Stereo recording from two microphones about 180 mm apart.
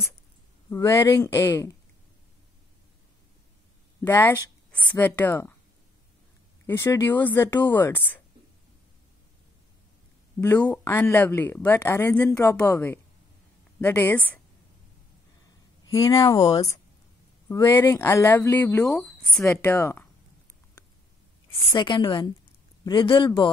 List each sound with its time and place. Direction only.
0.7 s speech: 15° left (ahead or behind)
4.0 s speech: 10° left (ahead or behind)
6.6 s speech: 15° left (ahead or behind)
10.4 s speech: 10° left (ahead or behind)
15.8 s a woman's voice: 20° left (ahead or behind)
17.5 s speech: 15° left (ahead or behind)
21.5 s a woman's voice: 25° left (ahead or behind)